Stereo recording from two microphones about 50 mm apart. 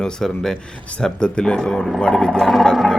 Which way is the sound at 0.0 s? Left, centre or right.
Centre.